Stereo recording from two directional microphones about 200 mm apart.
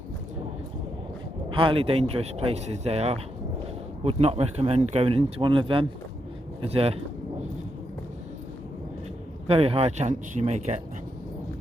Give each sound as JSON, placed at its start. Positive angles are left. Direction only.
{"t": 1.5, "sound": "speech", "side_deg": -25}
{"t": 9.5, "sound": "speech", "side_deg": -30}